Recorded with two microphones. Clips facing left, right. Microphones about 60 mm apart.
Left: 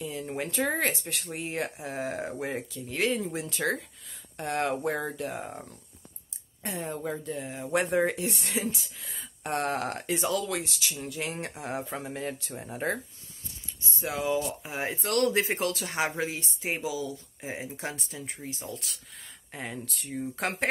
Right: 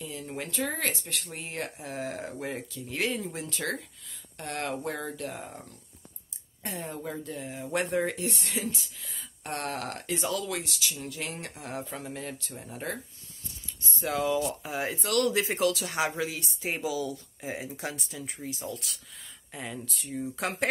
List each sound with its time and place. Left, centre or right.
0.0 s speech: centre
2.9 s speech: centre
6.6 s speech: centre
10.2 s speech: centre
11.0 s speech: centre
13.9 s speech: centre
14.5 s speech: left
16.6 s speech: centre; by 20.1 s left
20.1 s speech: left